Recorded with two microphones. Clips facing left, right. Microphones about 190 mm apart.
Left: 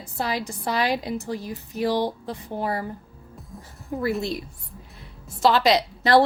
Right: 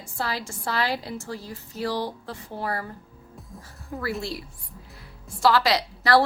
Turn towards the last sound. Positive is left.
turn(degrees=20)  # may be behind; listen again after turning